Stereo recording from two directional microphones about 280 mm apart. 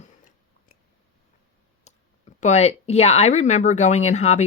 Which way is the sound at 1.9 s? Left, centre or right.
Left.